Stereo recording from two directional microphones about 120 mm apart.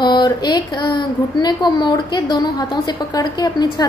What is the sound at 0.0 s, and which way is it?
Speech, 35° left (ahead or behind).